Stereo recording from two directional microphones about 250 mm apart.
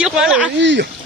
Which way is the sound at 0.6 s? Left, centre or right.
Right.